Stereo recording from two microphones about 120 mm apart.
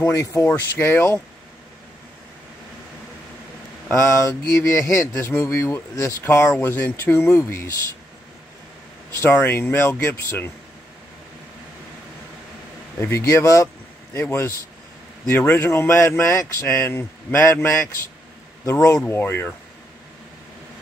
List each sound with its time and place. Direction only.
0.0 s speech: 25° left (ahead or behind)
3.9 s speech: 25° left (ahead or behind)
9.1 s speech: 20° left (ahead or behind)
13.0 s speech: 25° left (ahead or behind)